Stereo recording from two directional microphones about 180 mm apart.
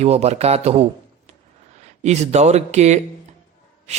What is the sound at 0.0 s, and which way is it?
Speech, 35° right (ahead or behind).